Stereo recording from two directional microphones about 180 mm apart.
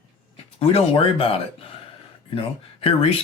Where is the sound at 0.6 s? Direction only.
30° left (ahead or behind).